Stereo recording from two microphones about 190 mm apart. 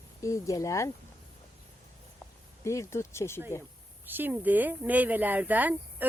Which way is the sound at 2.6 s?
15° left (ahead or behind).